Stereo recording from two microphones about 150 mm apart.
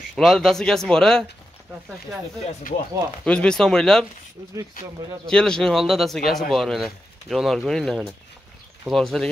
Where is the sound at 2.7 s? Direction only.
65° left (ahead or behind).